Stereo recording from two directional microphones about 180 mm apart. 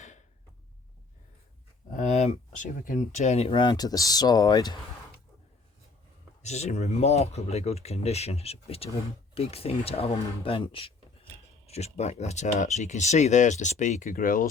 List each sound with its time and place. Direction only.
1.9 s speech: 40° left (ahead or behind); by 4.7 s 20° left (ahead or behind)
6.4 s speech: 40° left (ahead or behind)